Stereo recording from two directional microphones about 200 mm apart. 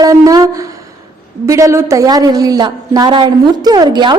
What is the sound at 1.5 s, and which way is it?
A woman's voice, 15° right (ahead or behind).